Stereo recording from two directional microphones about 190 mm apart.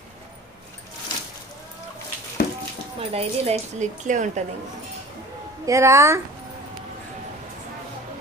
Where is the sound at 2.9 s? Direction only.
30° right (ahead or behind).